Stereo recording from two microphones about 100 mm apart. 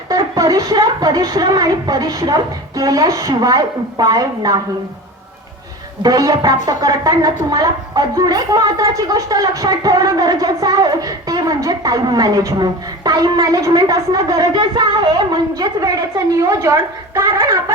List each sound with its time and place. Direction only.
0.1 s a woman's voice: 35° right (ahead or behind)
6.0 s a woman's voice: 40° right (ahead or behind)